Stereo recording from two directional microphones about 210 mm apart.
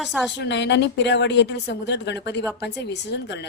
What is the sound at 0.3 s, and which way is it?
Speech, 55° left (ahead or behind).